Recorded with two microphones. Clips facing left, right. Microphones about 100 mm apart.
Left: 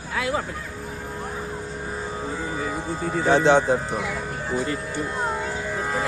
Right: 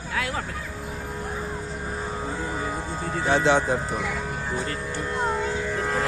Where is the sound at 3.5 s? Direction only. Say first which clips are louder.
Left 3 dB; 35° left (ahead or behind).